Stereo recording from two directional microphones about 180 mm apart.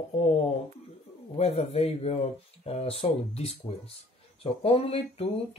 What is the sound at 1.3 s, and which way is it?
Speech, 35° left (ahead or behind).